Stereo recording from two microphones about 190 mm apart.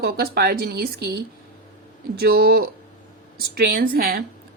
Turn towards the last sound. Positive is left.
turn(degrees=-55)  # may be behind; listen again after turning